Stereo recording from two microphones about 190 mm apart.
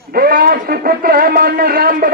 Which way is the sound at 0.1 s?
50° right (ahead or behind).